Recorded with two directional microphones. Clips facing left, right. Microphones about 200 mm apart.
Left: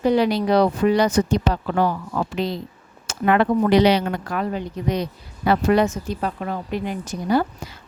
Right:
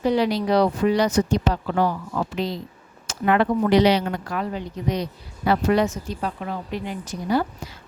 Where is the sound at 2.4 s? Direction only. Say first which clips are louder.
Left 2 dB; 60° left (ahead or behind).